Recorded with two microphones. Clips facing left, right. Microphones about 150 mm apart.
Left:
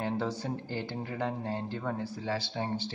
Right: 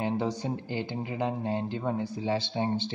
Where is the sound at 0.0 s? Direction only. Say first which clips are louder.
Right 3 dB; 15° right (ahead or behind).